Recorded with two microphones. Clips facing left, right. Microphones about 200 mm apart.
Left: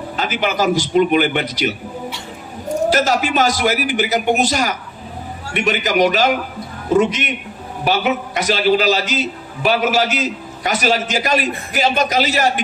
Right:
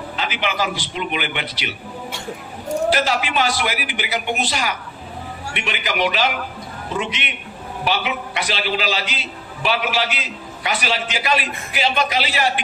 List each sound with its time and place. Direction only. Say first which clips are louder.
0.2 s a man's voice: left 5 dB; 45° left (ahead or behind)
2.9 s a man's voice: left 6 dB; 45° left (ahead or behind)